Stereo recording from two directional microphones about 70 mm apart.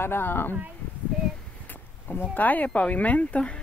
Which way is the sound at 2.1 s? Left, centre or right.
Left.